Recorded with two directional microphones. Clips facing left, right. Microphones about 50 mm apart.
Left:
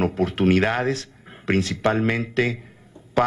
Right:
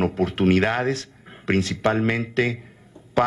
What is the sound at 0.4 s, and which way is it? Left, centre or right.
A man's voice, centre.